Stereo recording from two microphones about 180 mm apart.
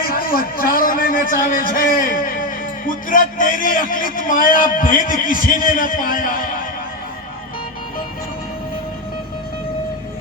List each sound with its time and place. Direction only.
0.1 s speech: 50° left (ahead or behind)